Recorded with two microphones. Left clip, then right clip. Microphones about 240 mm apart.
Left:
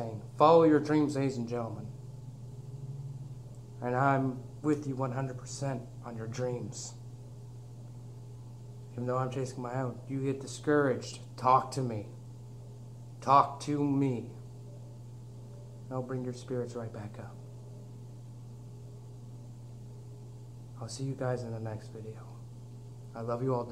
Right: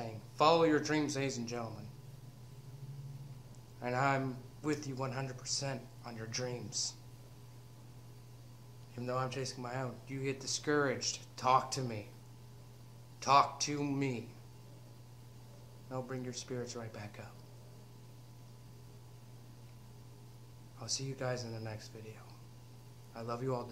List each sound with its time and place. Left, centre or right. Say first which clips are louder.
0.0 s a sound: left 5 dB; centre
0.8 s speech: left 5 dB; centre
4.0 s speech: left 5 dB; centre
5.0 s speech: left 4 dB; centre
9.0 s speech: left 4 dB; centre
11.0 s speech: right 1 dB; centre
13.2 s speech: left 4 dB; centre
15.9 s speech: left 4 dB; centre
21.2 s speech: left 7 dB; centre
21.5 s a man's voice: left 5 dB; centre
23.1 s speech: left 6 dB; centre